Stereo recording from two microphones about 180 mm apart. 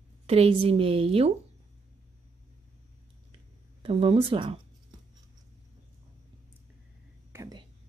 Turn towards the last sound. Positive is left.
turn(degrees=-15)  # may be behind; listen again after turning